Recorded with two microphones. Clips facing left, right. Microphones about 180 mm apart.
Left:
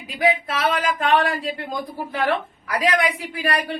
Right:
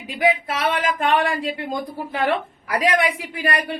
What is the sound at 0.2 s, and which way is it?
A woman's voice, 25° right (ahead or behind).